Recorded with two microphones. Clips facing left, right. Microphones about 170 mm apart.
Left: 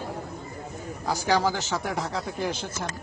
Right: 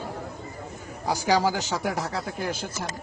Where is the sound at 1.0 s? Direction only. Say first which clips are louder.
Right 1 dB; 10° right (ahead or behind).